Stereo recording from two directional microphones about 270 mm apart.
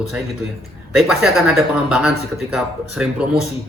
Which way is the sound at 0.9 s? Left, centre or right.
Centre.